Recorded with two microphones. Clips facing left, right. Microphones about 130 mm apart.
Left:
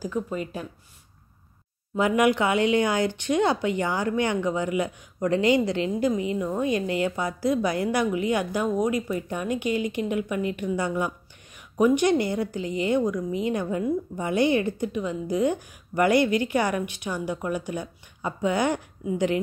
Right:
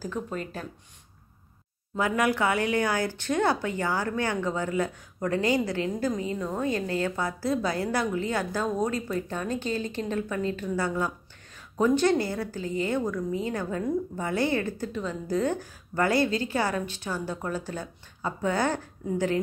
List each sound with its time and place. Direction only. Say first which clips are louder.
0.0 s speech: left 4 dB; 10° left (ahead or behind)
2.0 s speech: left 4 dB; 20° left (ahead or behind)